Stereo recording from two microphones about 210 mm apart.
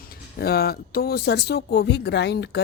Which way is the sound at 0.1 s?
45° left (ahead or behind).